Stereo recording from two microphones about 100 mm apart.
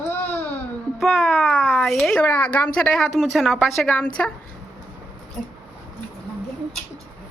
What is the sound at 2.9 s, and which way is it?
Speech, centre (ahead or behind).